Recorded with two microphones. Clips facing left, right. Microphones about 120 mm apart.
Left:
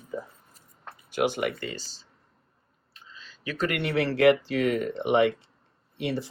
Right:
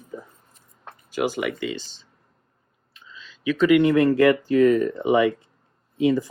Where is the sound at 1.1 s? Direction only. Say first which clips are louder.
Right 2 dB; 55° left (ahead or behind).